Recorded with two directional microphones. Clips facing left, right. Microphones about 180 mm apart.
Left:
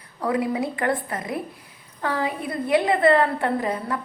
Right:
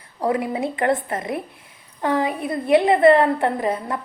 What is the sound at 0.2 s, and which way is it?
A woman's voice, 25° right (ahead or behind).